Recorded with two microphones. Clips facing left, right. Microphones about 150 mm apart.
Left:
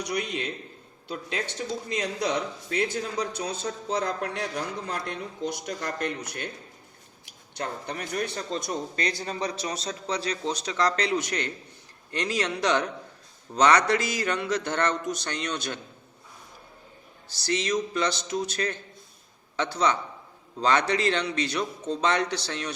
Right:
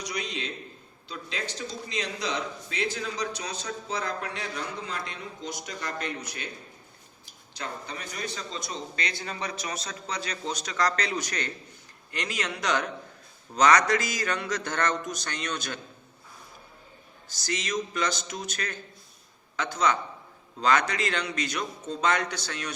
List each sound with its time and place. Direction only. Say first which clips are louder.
0.0 s a man's voice: left 4 dB; 55° left (ahead or behind); by 15.8 s 30° left (ahead or behind)
17.2 s a man's voice: left 5 dB; 30° left (ahead or behind)